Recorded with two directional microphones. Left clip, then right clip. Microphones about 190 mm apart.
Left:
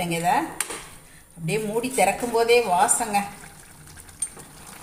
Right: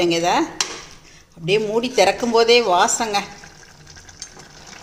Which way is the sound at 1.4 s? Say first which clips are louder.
Right 7 dB; 45° right (ahead or behind).